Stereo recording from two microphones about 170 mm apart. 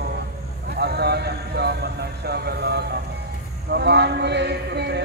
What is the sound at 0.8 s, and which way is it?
Speech, 75° right (ahead or behind).